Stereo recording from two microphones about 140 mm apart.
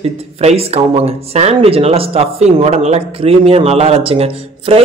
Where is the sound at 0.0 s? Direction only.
45° right (ahead or behind).